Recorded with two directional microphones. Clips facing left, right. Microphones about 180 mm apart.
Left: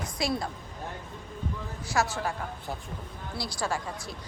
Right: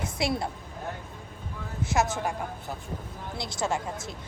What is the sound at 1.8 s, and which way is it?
Speech, 20° right (ahead or behind).